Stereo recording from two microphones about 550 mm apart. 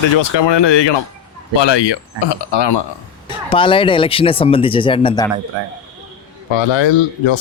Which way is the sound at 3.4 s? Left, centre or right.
Centre.